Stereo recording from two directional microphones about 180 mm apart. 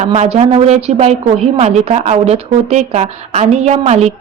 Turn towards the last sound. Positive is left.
turn(degrees=-35)  # may be behind; listen again after turning